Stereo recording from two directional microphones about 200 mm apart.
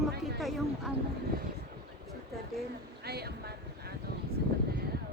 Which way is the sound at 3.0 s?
55° right (ahead or behind).